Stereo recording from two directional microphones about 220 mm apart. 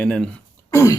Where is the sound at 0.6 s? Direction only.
15° left (ahead or behind).